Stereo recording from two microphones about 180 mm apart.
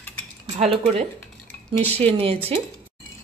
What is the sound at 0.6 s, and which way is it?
Speech, 35° right (ahead or behind).